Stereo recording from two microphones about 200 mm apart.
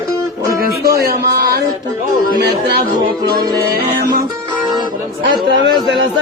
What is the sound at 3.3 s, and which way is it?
Music, 50° right (ahead or behind).